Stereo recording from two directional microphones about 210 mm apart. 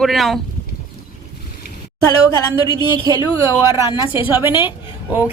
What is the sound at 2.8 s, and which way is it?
A woman's voice, 20° right (ahead or behind).